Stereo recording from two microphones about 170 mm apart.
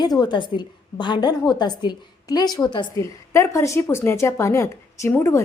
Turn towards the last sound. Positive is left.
turn(degrees=15)  # may be behind; listen again after turning